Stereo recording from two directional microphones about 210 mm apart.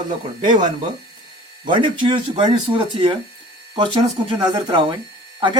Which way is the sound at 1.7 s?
20° right (ahead or behind).